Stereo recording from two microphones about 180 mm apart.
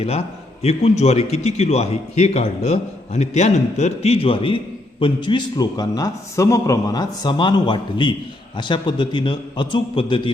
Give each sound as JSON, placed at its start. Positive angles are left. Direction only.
{"t": 0.6, "sound": "a man's voice", "side_deg": 35}